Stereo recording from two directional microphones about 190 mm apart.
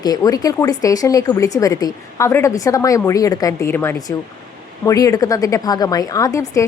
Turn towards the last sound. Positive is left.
turn(degrees=15)  # may be behind; listen again after turning